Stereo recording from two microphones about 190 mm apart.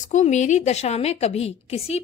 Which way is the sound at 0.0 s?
40° left (ahead or behind).